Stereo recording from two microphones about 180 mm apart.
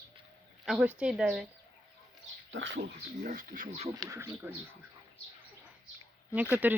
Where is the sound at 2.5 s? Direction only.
80° right.